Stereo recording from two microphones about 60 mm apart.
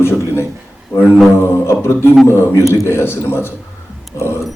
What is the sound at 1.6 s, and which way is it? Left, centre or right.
Speech, left.